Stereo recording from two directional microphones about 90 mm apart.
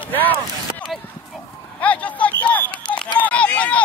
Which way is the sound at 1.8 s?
15° left (ahead or behind).